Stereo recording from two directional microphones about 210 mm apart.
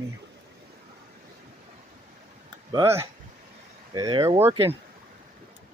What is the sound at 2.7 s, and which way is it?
Speech, 15° right (ahead or behind).